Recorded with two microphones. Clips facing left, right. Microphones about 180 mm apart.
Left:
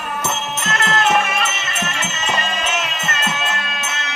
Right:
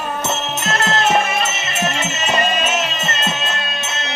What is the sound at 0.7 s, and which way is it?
Music, 30° right (ahead or behind).